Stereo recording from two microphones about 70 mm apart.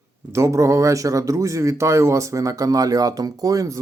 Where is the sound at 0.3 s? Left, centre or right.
Right.